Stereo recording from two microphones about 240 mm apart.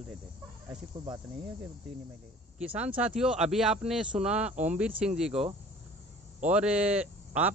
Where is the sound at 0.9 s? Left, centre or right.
Centre.